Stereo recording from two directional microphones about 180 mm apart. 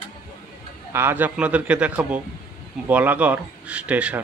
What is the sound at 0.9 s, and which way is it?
A man's voice, 10° right (ahead or behind).